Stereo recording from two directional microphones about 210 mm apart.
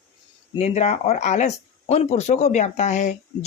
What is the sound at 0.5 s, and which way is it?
Speech, 30° left (ahead or behind).